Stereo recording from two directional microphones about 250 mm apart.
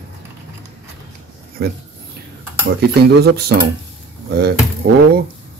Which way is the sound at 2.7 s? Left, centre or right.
Right.